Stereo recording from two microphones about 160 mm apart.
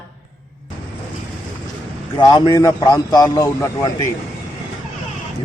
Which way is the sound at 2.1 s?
25° left (ahead or behind).